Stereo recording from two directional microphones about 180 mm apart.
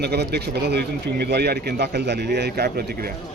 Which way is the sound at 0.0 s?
65° right (ahead or behind).